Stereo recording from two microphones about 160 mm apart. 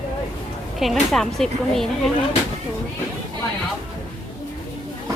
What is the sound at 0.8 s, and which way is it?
Speech, centre (ahead or behind).